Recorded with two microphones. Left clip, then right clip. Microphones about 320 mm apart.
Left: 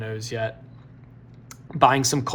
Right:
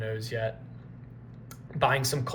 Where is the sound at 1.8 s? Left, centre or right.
Centre.